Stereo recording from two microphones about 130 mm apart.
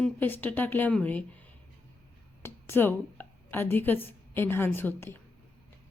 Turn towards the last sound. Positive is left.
turn(degrees=15)  # may be behind; listen again after turning